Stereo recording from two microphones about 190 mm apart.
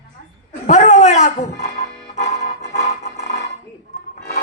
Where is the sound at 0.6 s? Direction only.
40° left (ahead or behind).